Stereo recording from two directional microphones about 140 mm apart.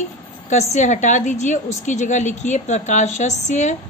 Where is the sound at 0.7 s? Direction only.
60° left (ahead or behind).